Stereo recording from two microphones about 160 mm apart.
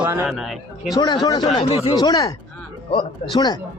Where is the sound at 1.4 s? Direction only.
40° left (ahead or behind).